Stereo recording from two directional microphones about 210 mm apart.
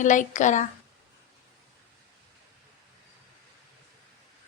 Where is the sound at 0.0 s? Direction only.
35° left (ahead or behind).